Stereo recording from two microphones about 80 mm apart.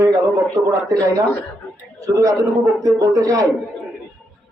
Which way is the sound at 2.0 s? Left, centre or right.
Right.